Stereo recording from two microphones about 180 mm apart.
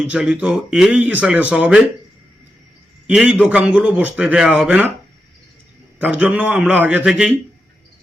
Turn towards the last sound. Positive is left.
turn(degrees=-5)  # may be behind; listen again after turning